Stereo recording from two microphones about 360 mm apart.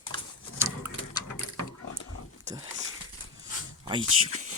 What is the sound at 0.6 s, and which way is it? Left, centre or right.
Printer, centre.